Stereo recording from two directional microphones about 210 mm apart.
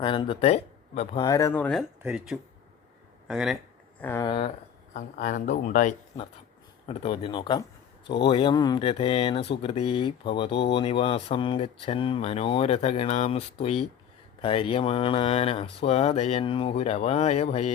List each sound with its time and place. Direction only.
0.0 s speech: 20° left (ahead or behind)
1.2 s speech: 15° left (ahead or behind)
2.0 s speech: 5° right (ahead or behind)
4.0 s speech: 10° left (ahead or behind)
4.3 s speech: 30° left (ahead or behind)